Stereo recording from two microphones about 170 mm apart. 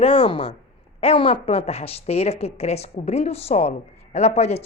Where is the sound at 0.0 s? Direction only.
35° left (ahead or behind).